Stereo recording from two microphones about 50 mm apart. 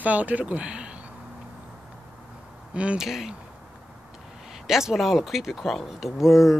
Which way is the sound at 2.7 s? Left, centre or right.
Right.